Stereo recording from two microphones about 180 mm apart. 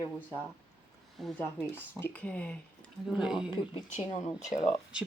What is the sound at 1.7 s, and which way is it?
Speech, 10° left (ahead or behind).